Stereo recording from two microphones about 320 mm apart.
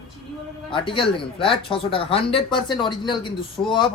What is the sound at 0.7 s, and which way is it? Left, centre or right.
Speech, centre.